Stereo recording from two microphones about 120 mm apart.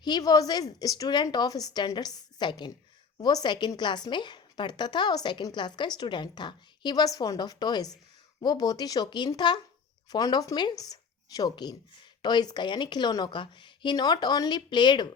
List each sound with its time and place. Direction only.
0.0 s a woman's voice: 35° left (ahead or behind)